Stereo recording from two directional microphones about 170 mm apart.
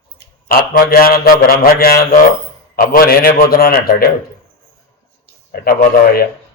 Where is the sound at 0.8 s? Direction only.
60° left (ahead or behind).